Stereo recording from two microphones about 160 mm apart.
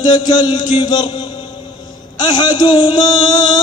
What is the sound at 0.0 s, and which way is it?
Mantra, 25° left (ahead or behind).